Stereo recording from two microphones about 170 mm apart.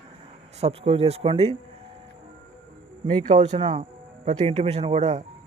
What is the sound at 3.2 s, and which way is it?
Speech, 40° right (ahead or behind).